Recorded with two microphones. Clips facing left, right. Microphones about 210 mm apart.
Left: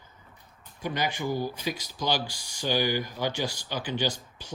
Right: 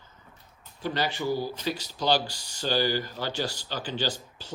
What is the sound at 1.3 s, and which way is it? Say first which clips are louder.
Speech: right 1 dB; 15° left (ahead or behind).